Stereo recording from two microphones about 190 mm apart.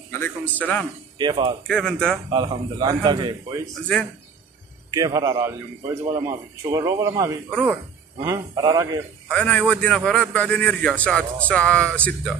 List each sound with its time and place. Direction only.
0.2 s speech: 10° left (ahead or behind)
1.1 s a man's voice: 25° right (ahead or behind)
1.7 s a man's voice: 5° left (ahead or behind)
2.3 s a man's voice: 25° right (ahead or behind)
3.8 s a man's voice: 5° left (ahead or behind)
4.9 s a man's voice: 20° right (ahead or behind)
9.3 s a man's voice: 5° left (ahead or behind)